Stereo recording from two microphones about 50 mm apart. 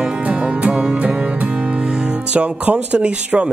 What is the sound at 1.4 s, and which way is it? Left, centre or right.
Speech, right.